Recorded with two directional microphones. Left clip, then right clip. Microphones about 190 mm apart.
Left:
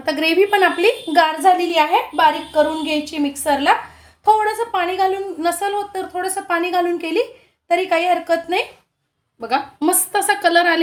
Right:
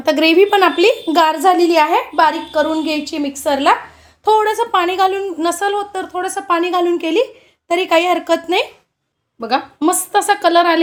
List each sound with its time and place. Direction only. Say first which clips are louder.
0.0 s a woman's voice: right 5 dB; 45° right (ahead or behind)
9.4 s a woman's voice: right 3 dB; 20° right (ahead or behind)